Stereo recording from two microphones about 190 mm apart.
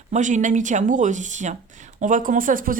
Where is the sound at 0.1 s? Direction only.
40° right (ahead or behind).